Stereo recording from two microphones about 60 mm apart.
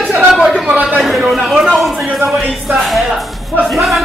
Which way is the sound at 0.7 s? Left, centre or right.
Right.